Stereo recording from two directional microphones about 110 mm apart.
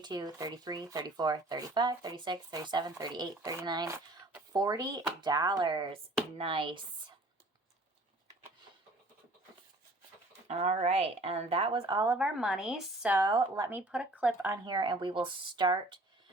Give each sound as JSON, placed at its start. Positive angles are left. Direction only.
{"t": 0.0, "sound": "speech", "side_deg": -40}
{"t": 10.5, "sound": "speech", "side_deg": -75}
{"t": 11.9, "sound": "speech", "side_deg": -35}
{"t": 12.1, "sound": "a woman's voice", "side_deg": -10}
{"t": 13.2, "sound": "speech", "side_deg": -35}
{"t": 13.7, "sound": "a woman's voice", "side_deg": -15}
{"t": 14.5, "sound": "speech", "side_deg": -40}